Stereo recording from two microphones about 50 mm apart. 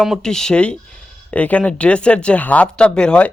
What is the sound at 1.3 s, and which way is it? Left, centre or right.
Speech, left.